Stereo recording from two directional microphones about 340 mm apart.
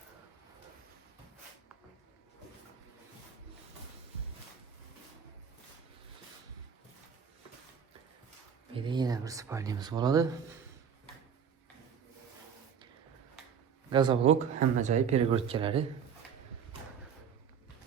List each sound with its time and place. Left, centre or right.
8.7 s speech: centre
13.9 s speech: centre